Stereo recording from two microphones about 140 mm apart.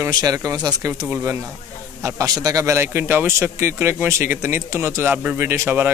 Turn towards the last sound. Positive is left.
turn(degrees=-15)  # may be behind; listen again after turning